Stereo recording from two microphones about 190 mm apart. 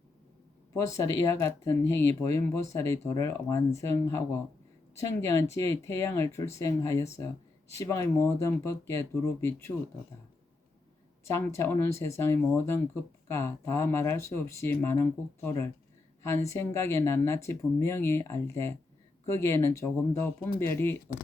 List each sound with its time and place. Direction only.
0.7 s speech: 15° left (ahead or behind)
11.3 s speech: 15° left (ahead or behind)